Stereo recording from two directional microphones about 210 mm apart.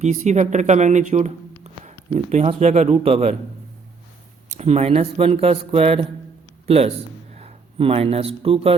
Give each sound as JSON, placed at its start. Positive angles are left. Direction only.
{"t": 0.0, "sound": "speech", "side_deg": -35}
{"t": 4.4, "sound": "speech", "side_deg": -30}